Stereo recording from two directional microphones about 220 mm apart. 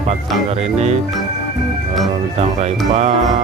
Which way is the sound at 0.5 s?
30° right (ahead or behind).